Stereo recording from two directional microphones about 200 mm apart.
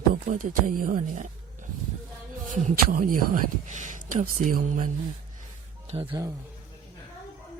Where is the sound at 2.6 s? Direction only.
40° right (ahead or behind).